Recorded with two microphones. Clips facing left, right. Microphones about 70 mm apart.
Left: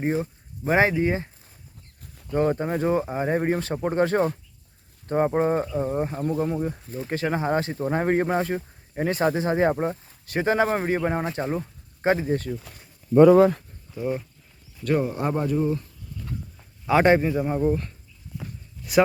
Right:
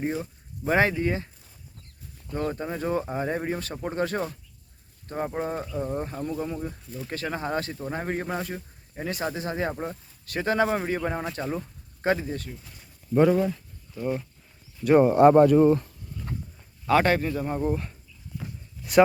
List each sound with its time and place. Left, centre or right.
0.0 s speech: left
0.6 s speech: centre
2.3 s speech: left
2.8 s speech: centre
3.4 s speech: left
5.6 s speech: left
7.9 s speech: left
13.9 s speech: centre
15.0 s speech: right
16.6 s a man's voice: centre
17.7 s speech: centre